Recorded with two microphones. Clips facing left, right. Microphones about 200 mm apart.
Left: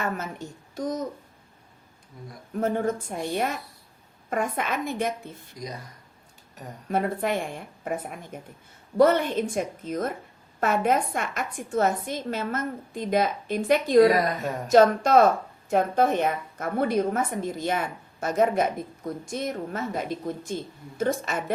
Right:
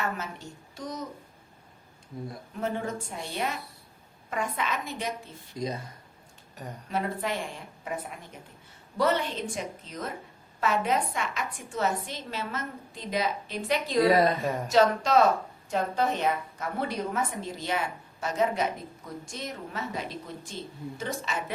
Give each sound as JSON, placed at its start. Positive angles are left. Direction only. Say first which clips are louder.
{"t": 0.0, "sound": "a woman's voice", "louder": "left 3 dB", "side_deg": 50}
{"t": 2.6, "sound": "a woman's voice", "louder": "left 6 dB", "side_deg": 50}
{"t": 5.5, "sound": "a woman's voice", "louder": "right 5 dB", "side_deg": -25}
{"t": 6.8, "sound": "a woman's voice", "louder": "left 5 dB", "side_deg": 50}
{"t": 14.1, "sound": "a woman's voice", "louder": "right 1 dB", "side_deg": -25}
{"t": 14.4, "sound": "speech", "louder": "right 1 dB", "side_deg": 0}
{"t": 14.7, "sound": "a woman's voice", "louder": "left 5 dB", "side_deg": 50}